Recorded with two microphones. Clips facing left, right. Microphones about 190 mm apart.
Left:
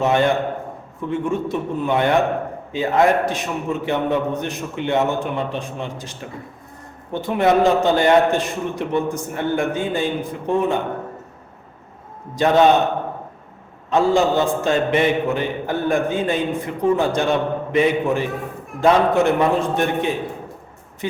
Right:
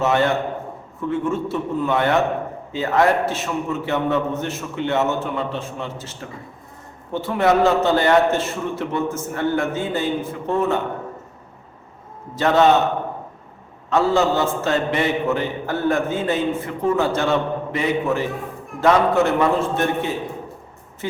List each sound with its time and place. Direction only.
0.0 s a man's voice: 15° left (ahead or behind)
12.3 s a man's voice: 15° left (ahead or behind)
13.9 s a man's voice: 15° left (ahead or behind)